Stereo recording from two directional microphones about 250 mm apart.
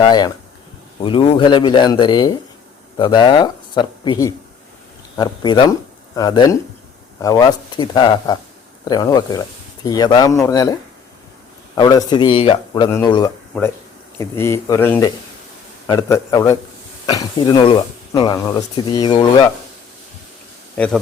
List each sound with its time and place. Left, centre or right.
0.0 s a man's voice: centre
20.7 s speech: centre